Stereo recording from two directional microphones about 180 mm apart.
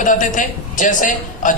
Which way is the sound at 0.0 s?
45° left (ahead or behind).